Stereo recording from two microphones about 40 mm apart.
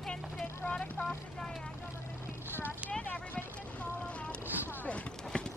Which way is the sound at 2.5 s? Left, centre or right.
Left.